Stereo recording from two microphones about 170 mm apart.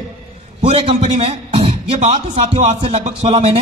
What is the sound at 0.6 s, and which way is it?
A man's voice, 30° right (ahead or behind).